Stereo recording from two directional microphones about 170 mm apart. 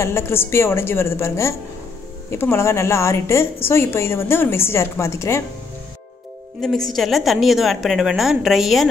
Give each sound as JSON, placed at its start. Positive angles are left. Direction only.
{"t": 0.0, "sound": "a woman's voice", "side_deg": 15}
{"t": 6.6, "sound": "a woman's voice", "side_deg": 0}